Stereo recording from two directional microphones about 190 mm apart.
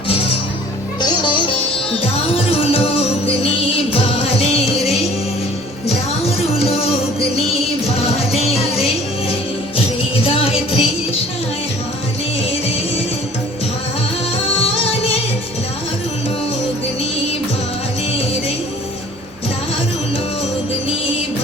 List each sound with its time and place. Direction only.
1.0 s music: 25° left (ahead or behind)
14.6 s music: 30° left (ahead or behind)